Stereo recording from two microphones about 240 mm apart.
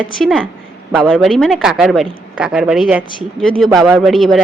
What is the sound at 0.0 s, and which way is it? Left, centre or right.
A woman's voice, centre.